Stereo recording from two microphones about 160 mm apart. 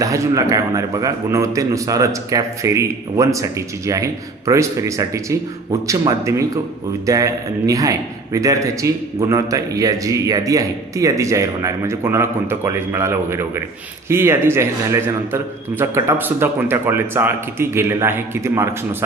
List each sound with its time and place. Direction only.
0.0 s a man's voice: 20° right (ahead or behind)